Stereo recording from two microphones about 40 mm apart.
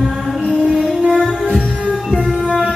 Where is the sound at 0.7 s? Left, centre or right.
Centre.